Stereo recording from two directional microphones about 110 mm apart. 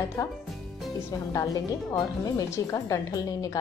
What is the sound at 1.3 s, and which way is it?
A woman's voice, 35° left (ahead or behind).